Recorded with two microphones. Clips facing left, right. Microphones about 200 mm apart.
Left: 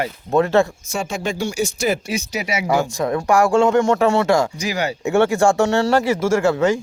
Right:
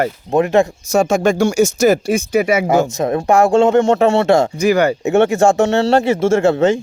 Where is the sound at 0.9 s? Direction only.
45° right (ahead or behind).